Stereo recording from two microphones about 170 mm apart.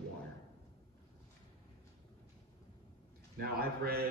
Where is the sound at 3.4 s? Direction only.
65° right (ahead or behind).